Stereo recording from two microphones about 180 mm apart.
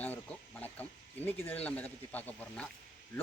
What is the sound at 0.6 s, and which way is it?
Speech, 10° left (ahead or behind).